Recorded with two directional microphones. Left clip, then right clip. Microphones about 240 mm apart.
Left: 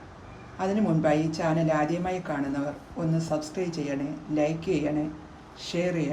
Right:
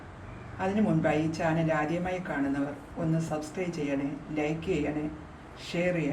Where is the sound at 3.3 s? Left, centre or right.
Centre.